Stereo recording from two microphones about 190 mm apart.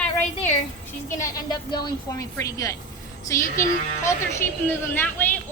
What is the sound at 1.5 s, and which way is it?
A woman's voice, 20° left (ahead or behind).